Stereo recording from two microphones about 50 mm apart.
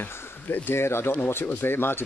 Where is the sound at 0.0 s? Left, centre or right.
Left.